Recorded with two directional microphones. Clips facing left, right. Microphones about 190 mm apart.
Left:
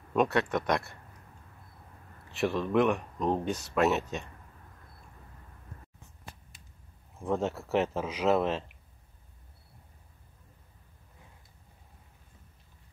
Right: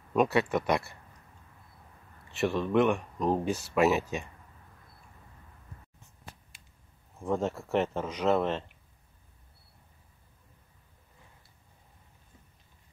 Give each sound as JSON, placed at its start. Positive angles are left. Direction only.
{"t": 0.1, "sound": "speech", "side_deg": -5}
{"t": 2.2, "sound": "speech", "side_deg": 0}
{"t": 7.2, "sound": "speech", "side_deg": 0}